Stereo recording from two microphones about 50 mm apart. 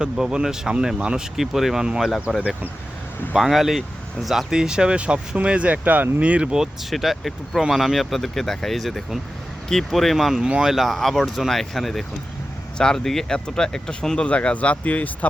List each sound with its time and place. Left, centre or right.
0.0 s speech: centre
1.4 s speech: centre
2.3 s speech: centre
3.3 s speech: centre
4.5 s speech: centre
6.9 s speech: centre
10.4 s speech: centre
14.3 s speech: left